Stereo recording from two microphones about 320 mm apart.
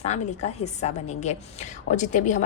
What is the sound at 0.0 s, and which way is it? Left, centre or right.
A woman's voice, left.